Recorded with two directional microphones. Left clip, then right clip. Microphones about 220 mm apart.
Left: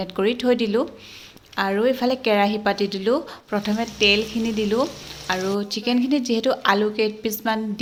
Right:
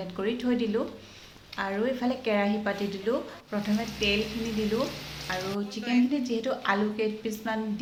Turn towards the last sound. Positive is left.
turn(degrees=40)  # may be behind; listen again after turning